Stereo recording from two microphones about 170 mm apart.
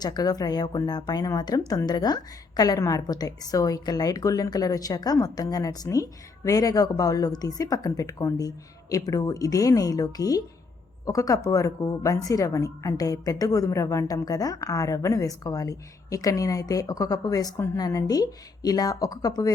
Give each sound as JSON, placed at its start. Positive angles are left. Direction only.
{"t": 0.0, "sound": "speech", "side_deg": 25}